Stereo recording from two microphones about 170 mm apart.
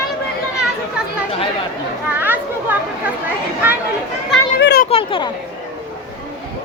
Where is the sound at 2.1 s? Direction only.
10° right (ahead or behind).